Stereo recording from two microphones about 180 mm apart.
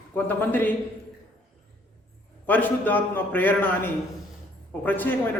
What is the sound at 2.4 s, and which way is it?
A man's voice, 10° left (ahead or behind).